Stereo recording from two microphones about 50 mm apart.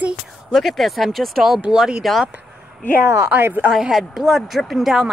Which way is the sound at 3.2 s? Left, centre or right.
Right.